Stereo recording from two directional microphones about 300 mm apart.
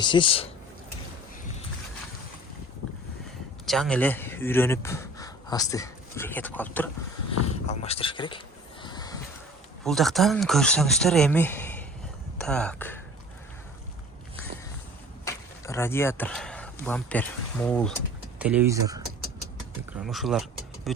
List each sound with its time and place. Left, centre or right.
0.0 s speech: centre
2.8 s boat: left
3.7 s speech: centre
7.7 s speech: centre
8.8 s a sound: centre
9.8 s speech: centre
15.2 s speech: centre
20.0 s speech: centre